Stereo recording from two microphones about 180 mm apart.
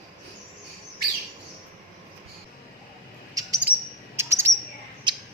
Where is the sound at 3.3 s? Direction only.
20° right (ahead or behind).